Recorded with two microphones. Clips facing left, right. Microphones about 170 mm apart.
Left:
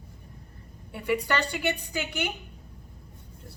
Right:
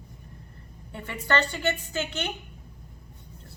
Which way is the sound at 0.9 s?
10° left (ahead or behind).